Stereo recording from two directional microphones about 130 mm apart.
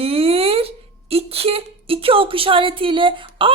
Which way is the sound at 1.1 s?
50° right (ahead or behind).